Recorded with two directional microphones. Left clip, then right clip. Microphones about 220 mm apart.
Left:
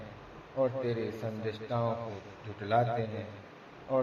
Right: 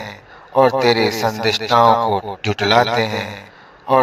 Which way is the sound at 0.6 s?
45° right (ahead or behind).